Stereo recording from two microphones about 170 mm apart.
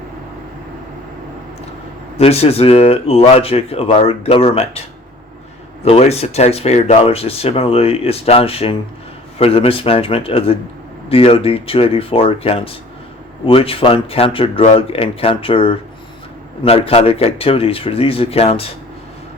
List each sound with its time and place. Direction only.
2.1 s speech: 35° left (ahead or behind)
5.8 s speech: 40° left (ahead or behind)